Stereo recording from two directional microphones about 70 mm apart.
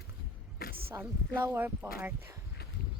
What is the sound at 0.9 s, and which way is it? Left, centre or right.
Speech, right.